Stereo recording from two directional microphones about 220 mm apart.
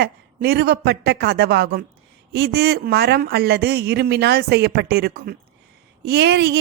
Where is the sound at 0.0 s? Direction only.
45° right (ahead or behind).